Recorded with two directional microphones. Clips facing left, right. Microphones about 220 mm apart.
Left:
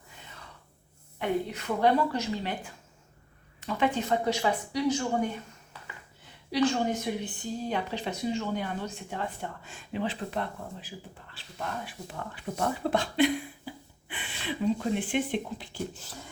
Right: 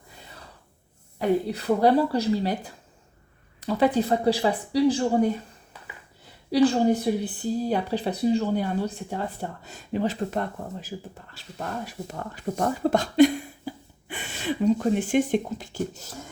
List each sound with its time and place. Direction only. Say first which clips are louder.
1.2 s a woman's voice: right 6 dB; 35° right (ahead or behind)
3.6 s a woman's voice: right 6 dB; 35° right (ahead or behind)